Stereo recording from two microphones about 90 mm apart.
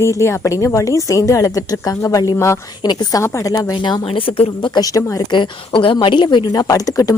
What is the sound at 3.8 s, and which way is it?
Speech, 60° left (ahead or behind).